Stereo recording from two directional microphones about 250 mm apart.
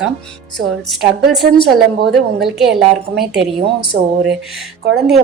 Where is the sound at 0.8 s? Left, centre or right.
Centre.